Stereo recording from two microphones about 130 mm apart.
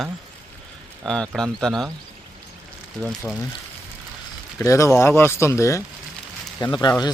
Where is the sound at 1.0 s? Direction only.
5° left (ahead or behind).